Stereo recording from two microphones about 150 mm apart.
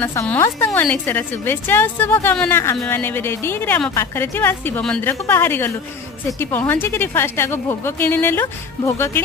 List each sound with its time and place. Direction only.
0.0 s a woman's voice: 15° left (ahead or behind)
2.6 s a woman's voice: 20° left (ahead or behind)